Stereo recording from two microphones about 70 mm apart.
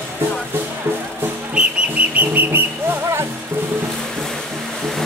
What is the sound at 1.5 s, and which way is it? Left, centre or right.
Whistle, centre.